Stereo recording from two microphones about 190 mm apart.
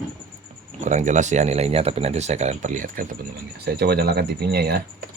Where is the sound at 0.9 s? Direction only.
40° right (ahead or behind).